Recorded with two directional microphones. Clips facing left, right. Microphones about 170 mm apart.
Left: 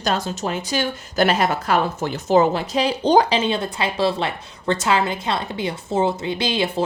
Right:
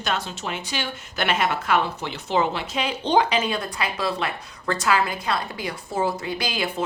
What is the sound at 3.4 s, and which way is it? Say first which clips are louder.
A woman's voice: left 4 dB; 25° left (ahead or behind).